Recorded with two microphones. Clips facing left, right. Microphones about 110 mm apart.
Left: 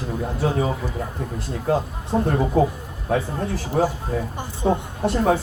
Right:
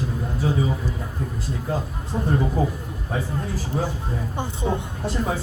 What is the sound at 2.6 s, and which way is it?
Speech, 70° left (ahead or behind).